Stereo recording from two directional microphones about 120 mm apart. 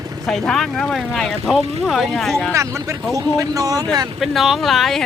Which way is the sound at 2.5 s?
25° right (ahead or behind).